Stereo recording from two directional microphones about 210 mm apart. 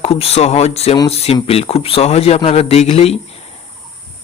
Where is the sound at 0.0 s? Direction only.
30° left (ahead or behind).